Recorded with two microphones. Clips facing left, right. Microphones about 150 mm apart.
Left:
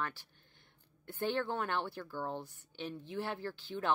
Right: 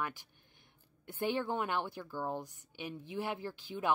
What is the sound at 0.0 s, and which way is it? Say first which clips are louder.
Speech: right 1 dB; 15° right (ahead or behind).